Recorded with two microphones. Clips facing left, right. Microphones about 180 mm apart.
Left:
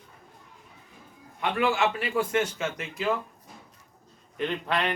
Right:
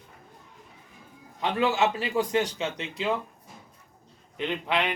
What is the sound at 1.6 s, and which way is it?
A man's voice, 20° right (ahead or behind).